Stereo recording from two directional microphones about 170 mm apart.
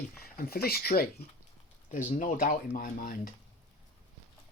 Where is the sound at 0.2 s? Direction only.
60° left (ahead or behind).